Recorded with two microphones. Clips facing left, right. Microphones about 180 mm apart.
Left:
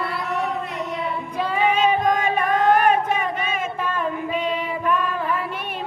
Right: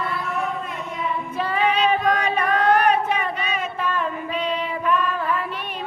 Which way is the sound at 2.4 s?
45° left (ahead or behind).